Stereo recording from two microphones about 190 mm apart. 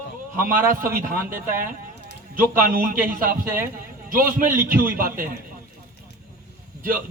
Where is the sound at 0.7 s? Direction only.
45° right (ahead or behind).